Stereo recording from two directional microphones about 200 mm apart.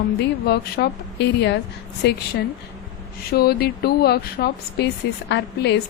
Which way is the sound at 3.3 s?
50° left (ahead or behind).